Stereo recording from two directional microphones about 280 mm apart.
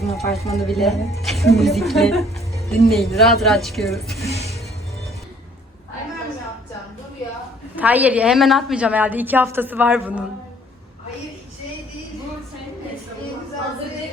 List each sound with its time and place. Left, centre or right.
0.1 s a woman's voice: centre
4.3 s music: left
7.8 s a woman's voice: centre